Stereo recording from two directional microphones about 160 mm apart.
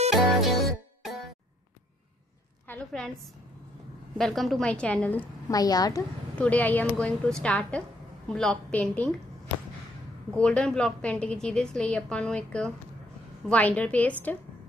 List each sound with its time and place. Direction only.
0.1 s music: centre (ahead or behind)
2.7 s a woman's voice: 5° left (ahead or behind)
4.2 s a woman's voice: centre (ahead or behind)
5.5 s a woman's voice: 25° left (ahead or behind)
6.3 s a woman's voice: 10° left (ahead or behind)
10.3 s a woman's voice: 5° left (ahead or behind)